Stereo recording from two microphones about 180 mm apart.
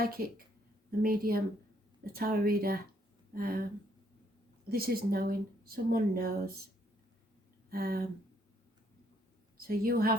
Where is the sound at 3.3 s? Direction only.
55° right (ahead or behind).